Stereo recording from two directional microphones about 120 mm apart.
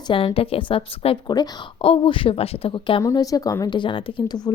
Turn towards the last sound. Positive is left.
turn(degrees=45)  # may be behind; listen again after turning